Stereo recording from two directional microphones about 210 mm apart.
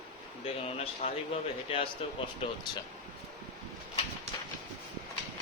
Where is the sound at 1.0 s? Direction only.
25° left (ahead or behind).